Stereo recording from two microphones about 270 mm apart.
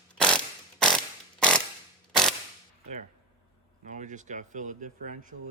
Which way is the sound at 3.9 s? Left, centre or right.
Right.